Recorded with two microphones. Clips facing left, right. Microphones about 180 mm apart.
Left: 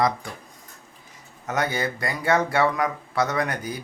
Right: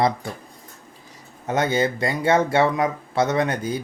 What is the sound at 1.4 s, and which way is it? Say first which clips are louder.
Speech: right 5 dB; 25° right (ahead or behind).